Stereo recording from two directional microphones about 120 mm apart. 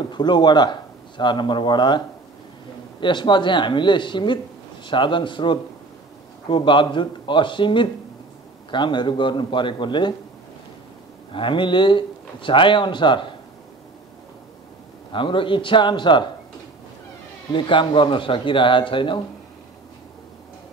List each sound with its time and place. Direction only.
0.1 s a man's voice: 40° left (ahead or behind)
11.3 s speech: 45° left (ahead or behind)
15.1 s speech: 45° left (ahead or behind)
17.5 s speech: 40° left (ahead or behind)